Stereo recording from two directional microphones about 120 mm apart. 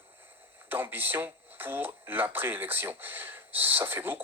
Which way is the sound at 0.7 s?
15° right (ahead or behind).